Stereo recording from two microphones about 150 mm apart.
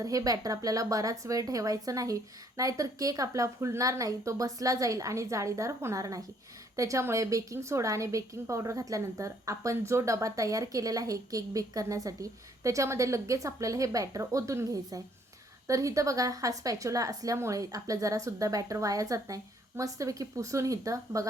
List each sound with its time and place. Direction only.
0.0 s a woman's voice: 25° right (ahead or behind)